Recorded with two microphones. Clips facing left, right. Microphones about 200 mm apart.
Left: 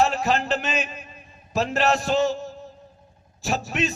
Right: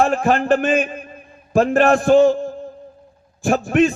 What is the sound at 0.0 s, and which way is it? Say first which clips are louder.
A man's voice: right 5 dB; 50° right (ahead or behind).